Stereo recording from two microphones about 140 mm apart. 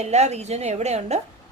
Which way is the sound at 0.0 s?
50° right (ahead or behind).